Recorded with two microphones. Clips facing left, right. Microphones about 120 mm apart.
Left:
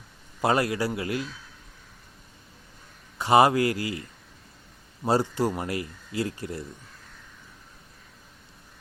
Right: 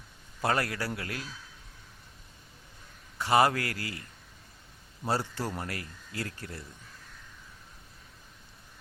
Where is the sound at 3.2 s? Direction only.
20° left (ahead or behind).